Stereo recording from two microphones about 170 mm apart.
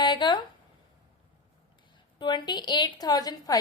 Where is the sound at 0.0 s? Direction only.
25° left (ahead or behind).